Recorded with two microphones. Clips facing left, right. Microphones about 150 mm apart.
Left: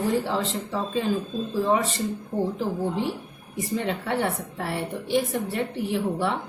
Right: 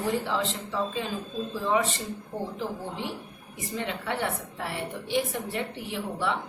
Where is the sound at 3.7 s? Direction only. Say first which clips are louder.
Left 4 dB; 40° left (ahead or behind).